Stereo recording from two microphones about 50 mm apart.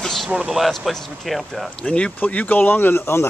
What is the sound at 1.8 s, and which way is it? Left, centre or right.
Speech, centre.